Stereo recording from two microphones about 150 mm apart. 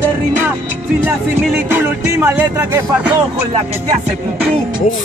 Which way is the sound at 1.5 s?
15° right (ahead or behind).